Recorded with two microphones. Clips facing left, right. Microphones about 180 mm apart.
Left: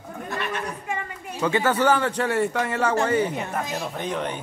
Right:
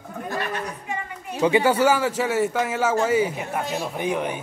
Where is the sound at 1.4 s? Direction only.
15° right (ahead or behind).